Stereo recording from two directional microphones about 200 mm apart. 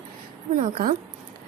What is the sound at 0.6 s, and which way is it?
Speech, 40° right (ahead or behind).